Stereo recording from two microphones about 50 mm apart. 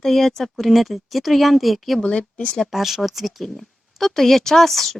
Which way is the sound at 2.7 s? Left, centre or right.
Centre.